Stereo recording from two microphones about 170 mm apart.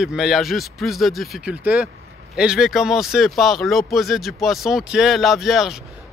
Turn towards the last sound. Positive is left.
turn(degrees=0)  # may be behind; listen again after turning